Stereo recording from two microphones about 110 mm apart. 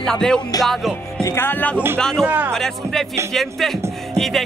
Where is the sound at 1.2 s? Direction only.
20° left (ahead or behind).